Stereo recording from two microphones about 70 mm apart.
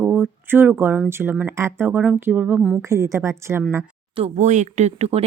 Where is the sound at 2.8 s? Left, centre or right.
Right.